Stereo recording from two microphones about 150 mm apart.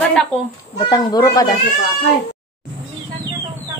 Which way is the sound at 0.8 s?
25° left (ahead or behind).